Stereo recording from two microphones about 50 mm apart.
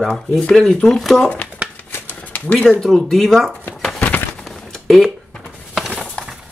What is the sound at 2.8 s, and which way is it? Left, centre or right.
Speech, centre.